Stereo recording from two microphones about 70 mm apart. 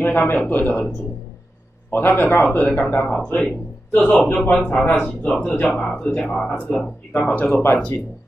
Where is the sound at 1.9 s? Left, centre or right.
Left.